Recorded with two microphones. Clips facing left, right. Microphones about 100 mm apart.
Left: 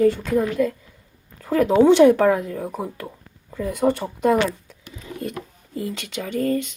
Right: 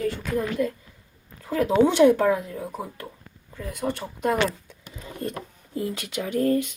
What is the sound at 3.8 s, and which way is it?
Speech, 55° left (ahead or behind).